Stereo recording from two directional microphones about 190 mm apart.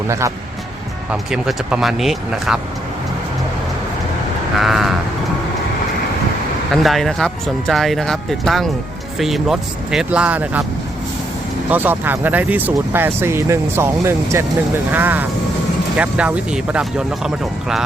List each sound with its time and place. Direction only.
0.1 s speech: 15° right (ahead or behind)
1.1 s speech: centre (ahead or behind)
4.5 s speech: centre (ahead or behind)
6.8 s speech: centre (ahead or behind)
11.7 s speech: 10° right (ahead or behind)